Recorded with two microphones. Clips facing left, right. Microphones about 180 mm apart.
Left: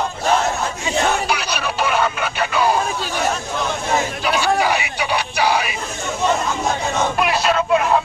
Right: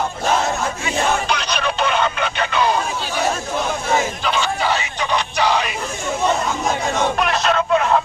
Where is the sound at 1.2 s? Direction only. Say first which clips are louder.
Right 1 dB; 10° left (ahead or behind).